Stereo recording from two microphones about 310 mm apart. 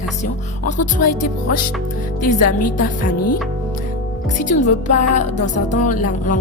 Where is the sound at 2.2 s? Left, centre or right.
Left.